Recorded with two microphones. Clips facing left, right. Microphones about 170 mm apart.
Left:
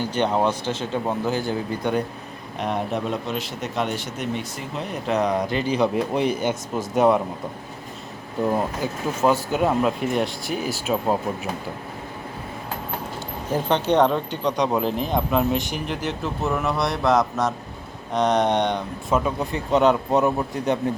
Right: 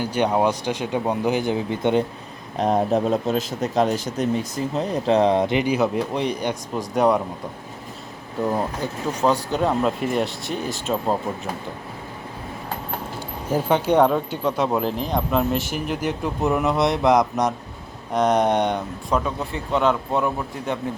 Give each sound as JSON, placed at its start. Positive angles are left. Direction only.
{"t": 0.0, "sound": "speech", "side_deg": -10}
{"t": 2.6, "sound": "speech", "side_deg": -35}
{"t": 5.7, "sound": "speech", "side_deg": 0}
{"t": 8.4, "sound": "speech", "side_deg": 5}
{"t": 13.5, "sound": "speech", "side_deg": -10}
{"t": 19.1, "sound": "speech", "side_deg": 15}